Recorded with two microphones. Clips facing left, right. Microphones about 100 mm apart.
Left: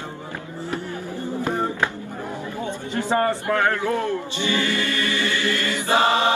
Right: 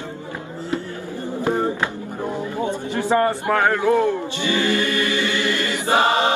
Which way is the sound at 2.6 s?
20° right (ahead or behind).